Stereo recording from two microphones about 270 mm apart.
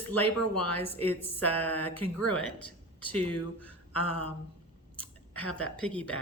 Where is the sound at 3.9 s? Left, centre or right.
Left.